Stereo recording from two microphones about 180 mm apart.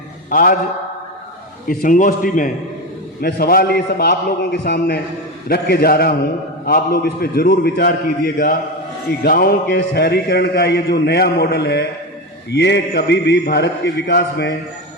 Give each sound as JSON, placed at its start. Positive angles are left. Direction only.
{"t": 0.3, "sound": "a man's voice", "side_deg": 50}
{"t": 1.6, "sound": "a man's voice", "side_deg": 50}
{"t": 3.2, "sound": "a man's voice", "side_deg": 60}